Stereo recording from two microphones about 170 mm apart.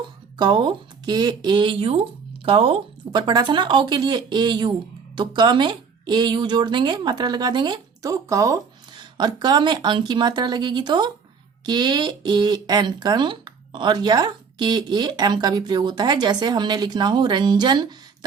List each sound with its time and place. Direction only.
0.3 s speech: 25° right (ahead or behind)